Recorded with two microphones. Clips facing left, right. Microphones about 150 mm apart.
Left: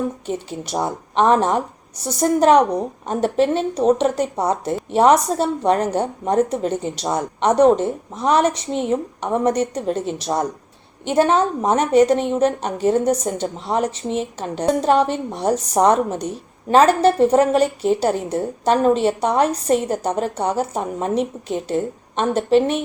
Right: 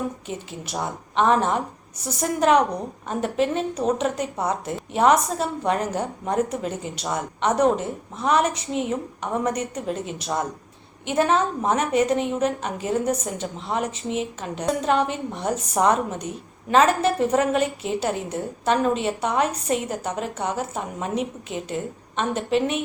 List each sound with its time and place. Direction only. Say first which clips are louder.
0.3 s a woman's voice: left 7 dB; 30° left (ahead or behind)